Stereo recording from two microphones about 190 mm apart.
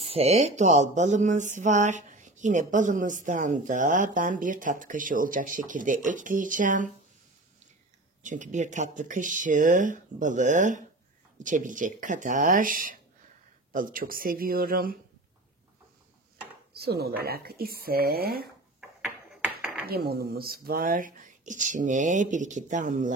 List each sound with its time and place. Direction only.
0.0 s speech: 30° right (ahead or behind)
8.2 s speech: 40° right (ahead or behind)
16.7 s speech: 55° right (ahead or behind)
19.9 s speech: 55° right (ahead or behind)